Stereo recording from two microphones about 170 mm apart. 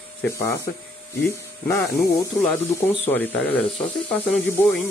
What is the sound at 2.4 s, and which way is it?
Speech, 10° left (ahead or behind).